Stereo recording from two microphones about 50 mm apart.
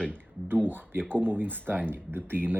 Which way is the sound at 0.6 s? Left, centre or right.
Right.